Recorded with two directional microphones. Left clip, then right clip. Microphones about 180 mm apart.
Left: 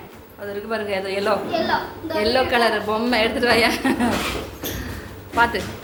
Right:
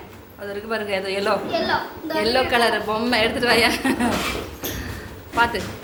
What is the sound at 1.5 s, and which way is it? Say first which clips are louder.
Speech: left 1 dB; 45° right (ahead or behind).